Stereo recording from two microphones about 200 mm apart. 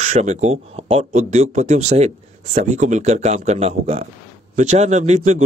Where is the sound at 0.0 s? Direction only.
35° right (ahead or behind).